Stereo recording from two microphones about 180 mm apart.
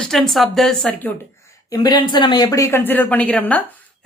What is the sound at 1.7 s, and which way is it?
A woman's voice, 20° left (ahead or behind).